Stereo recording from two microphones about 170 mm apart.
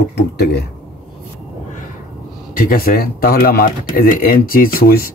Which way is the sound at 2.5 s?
60° left (ahead or behind).